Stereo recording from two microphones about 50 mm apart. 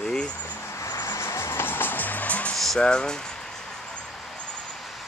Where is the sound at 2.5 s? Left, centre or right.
Centre.